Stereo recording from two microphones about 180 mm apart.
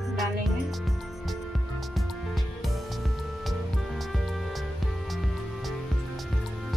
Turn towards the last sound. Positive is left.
turn(degrees=0)  # may be behind; listen again after turning